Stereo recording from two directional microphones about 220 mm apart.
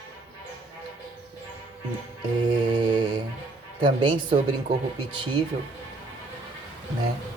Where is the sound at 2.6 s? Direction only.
20° right (ahead or behind).